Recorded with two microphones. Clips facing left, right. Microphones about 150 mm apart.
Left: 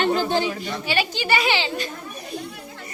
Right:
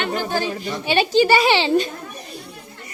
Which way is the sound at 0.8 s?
30° right (ahead or behind).